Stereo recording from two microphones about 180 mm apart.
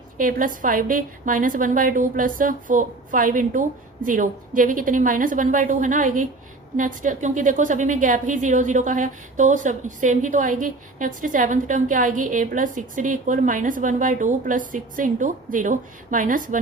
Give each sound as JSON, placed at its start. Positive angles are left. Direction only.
{"t": 0.2, "sound": "a woman's voice", "side_deg": -50}